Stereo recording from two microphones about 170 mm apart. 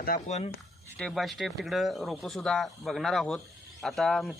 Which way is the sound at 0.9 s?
Centre (ahead or behind).